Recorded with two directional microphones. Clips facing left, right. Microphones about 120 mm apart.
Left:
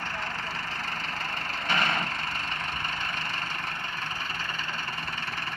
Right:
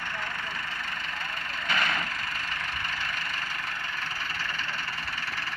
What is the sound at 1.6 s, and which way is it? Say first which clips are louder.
Vehicle: left 1 dB; 30° left (ahead or behind).